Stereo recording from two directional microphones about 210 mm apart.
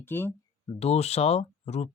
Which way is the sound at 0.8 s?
30° left (ahead or behind).